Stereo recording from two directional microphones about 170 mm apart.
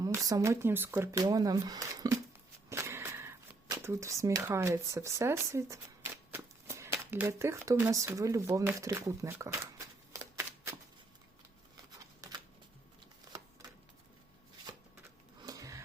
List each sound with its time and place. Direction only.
0.0 s speech: 20° right (ahead or behind)
6.3 s shuffling cards: 15° right (ahead or behind)
15.4 s sniff: 20° right (ahead or behind)